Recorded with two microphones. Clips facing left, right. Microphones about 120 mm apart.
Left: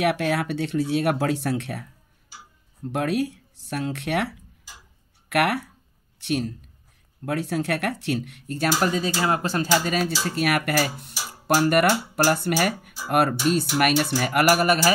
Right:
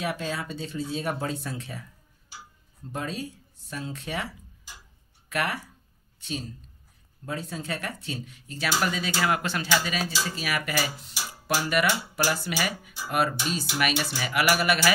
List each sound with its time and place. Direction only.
0.0 s speech: 75° left (ahead or behind)
2.9 s speech: 70° left (ahead or behind)
8.6 s speech: 40° left (ahead or behind)
10.0 s speech: 60° left (ahead or behind)
11.9 s speech: 40° left (ahead or behind)
12.4 s speech: 55° left (ahead or behind)